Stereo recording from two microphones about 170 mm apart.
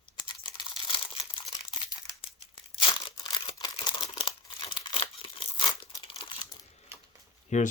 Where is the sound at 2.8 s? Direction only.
30° left (ahead or behind).